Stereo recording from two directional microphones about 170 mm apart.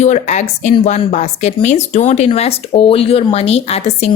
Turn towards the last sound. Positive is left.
turn(degrees=40)  # may be behind; listen again after turning